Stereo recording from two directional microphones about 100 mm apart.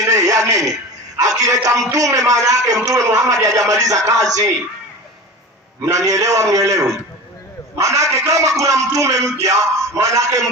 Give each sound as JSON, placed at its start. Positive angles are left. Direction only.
{"t": 0.0, "sound": "television", "side_deg": -35}
{"t": 1.1, "sound": "speech", "side_deg": -35}
{"t": 5.8, "sound": "speech", "side_deg": -30}